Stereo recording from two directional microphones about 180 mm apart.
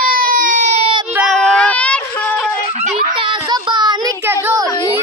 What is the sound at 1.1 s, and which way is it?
Child singing, 10° right (ahead or behind).